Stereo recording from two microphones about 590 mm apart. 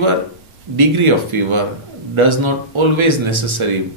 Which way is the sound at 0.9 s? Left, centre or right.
Right.